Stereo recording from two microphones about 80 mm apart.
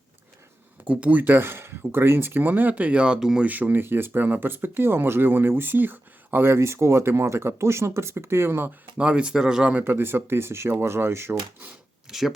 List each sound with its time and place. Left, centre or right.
0.9 s speech: centre
3.4 s speech: right
9.0 s speech: centre
9.7 s speech: right
12.0 s speech: centre